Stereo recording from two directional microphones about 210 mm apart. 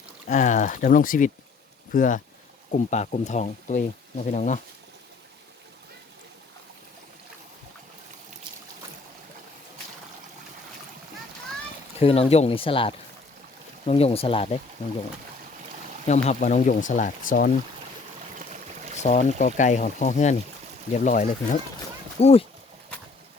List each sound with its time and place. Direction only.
0.3 s speech: 35° left (ahead or behind)
11.9 s speech: 30° left (ahead or behind)
16.0 s speech: 35° left (ahead or behind)
18.3 s a sound: 35° right (ahead or behind)
18.9 s speech: 30° left (ahead or behind)